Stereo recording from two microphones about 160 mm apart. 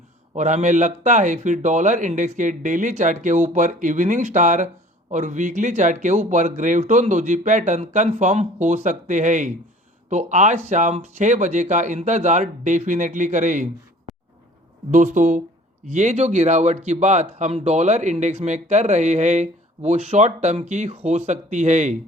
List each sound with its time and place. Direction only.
0.3 s speech: 50° right (ahead or behind)
14.8 s speech: 50° right (ahead or behind)